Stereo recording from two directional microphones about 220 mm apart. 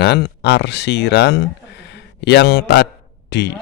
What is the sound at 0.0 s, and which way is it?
A man's voice, 50° left (ahead or behind).